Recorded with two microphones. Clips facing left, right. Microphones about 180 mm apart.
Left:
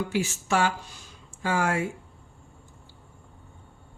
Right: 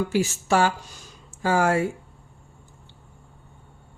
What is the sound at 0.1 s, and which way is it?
Speech, 40° right (ahead or behind).